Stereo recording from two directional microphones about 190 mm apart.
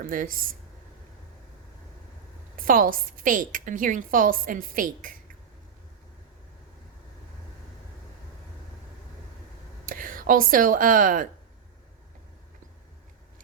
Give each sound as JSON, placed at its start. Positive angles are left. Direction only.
{"t": 0.0, "sound": "a woman's voice", "side_deg": -45}
{"t": 2.6, "sound": "a woman's voice", "side_deg": -45}
{"t": 9.8, "sound": "speech", "side_deg": -45}